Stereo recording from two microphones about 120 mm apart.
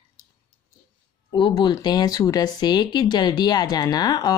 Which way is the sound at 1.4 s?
40° left (ahead or behind).